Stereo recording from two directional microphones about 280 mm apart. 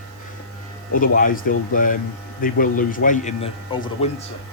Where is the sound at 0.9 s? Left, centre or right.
Left.